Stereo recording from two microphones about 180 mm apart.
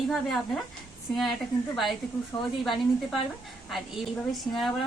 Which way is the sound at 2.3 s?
25° left (ahead or behind).